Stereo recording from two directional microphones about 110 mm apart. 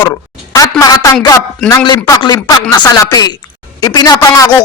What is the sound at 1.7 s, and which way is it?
Speech, 40° left (ahead or behind).